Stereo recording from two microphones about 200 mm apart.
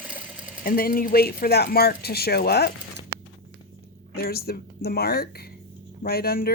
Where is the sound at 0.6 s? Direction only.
50° left (ahead or behind).